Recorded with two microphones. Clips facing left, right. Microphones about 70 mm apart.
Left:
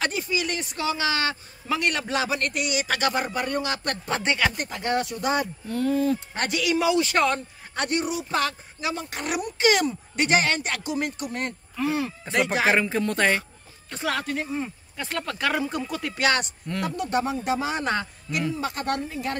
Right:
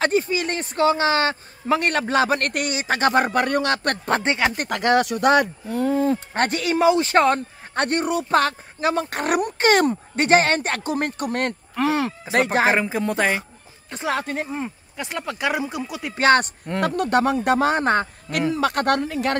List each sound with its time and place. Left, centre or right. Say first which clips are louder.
0.0 s speech: right 6 dB; right
2.7 s speech: right 5 dB; right
3.1 s speech: right 7 dB; right
4.2 s speech: right 3 dB; right
4.6 s speech: right 7 dB; right
5.9 s speech: right 2 dB; right
13.0 s speech: right 1 dB; centre
13.9 s speech: right 3 dB; right
15.0 s speech: right 2 dB; centre
16.2 s speech: right 8 dB; right
16.8 s speech: right 7 dB; right
18.5 s speech: right 11 dB; right